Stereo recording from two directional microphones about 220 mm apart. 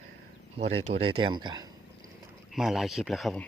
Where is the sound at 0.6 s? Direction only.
30° right (ahead or behind).